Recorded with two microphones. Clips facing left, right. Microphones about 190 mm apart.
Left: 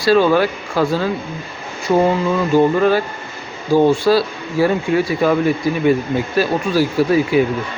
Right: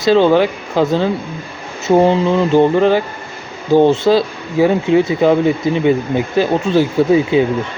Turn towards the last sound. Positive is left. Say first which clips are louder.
# right 2 dB
turn(degrees=-20)  # may be behind; listen again after turning